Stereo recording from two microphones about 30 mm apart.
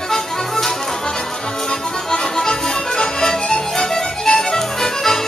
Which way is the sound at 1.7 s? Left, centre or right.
Left.